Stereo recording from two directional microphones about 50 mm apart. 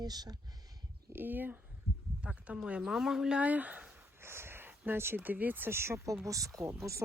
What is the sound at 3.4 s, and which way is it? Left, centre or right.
Speech, right.